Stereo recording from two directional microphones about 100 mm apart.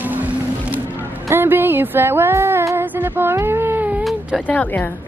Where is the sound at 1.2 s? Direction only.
20° right (ahead or behind).